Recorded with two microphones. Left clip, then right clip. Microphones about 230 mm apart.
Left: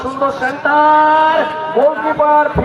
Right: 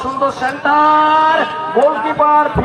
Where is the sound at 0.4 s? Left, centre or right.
Right.